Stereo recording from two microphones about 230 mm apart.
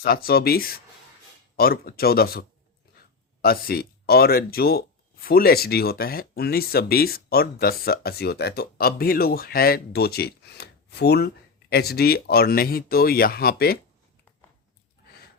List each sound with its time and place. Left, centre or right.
0.0 s speech: left